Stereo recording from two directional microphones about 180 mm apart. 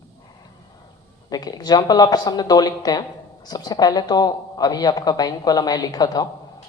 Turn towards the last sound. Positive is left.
turn(degrees=20)  # may be behind; listen again after turning